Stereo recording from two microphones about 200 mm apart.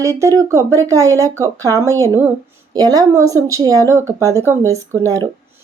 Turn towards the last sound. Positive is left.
turn(degrees=-15)  # may be behind; listen again after turning